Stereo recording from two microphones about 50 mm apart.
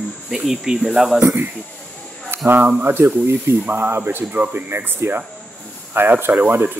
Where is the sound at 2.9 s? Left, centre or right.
Right.